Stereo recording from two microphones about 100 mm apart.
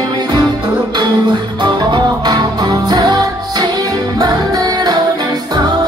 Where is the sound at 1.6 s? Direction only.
45° right (ahead or behind).